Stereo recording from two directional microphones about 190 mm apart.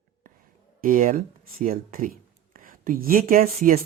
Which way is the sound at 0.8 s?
45° right (ahead or behind).